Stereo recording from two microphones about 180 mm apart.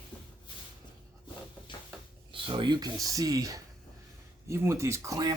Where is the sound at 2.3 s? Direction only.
30° right (ahead or behind).